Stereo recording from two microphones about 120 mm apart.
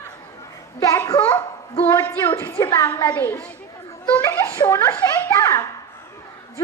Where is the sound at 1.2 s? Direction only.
10° left (ahead or behind).